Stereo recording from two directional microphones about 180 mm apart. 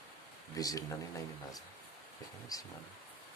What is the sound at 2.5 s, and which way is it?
Speech, 20° left (ahead or behind).